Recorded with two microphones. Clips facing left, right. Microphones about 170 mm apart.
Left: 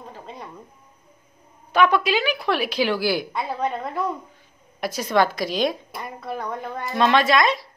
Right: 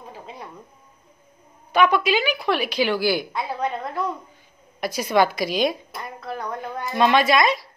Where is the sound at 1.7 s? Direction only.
Centre (ahead or behind).